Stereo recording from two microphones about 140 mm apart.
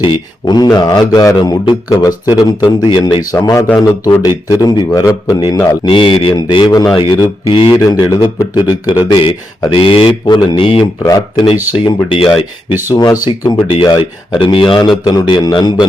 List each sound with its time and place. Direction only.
0.0 s speech: 35° left (ahead or behind)
3.3 s speech: 20° left (ahead or behind); by 10.8 s 40° left (ahead or behind)
11.0 s speech: 25° left (ahead or behind)
11.8 s speech: 40° left (ahead or behind)
12.9 s speech: 30° left (ahead or behind)